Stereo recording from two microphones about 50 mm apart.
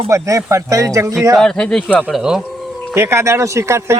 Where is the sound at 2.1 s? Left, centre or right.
Centre.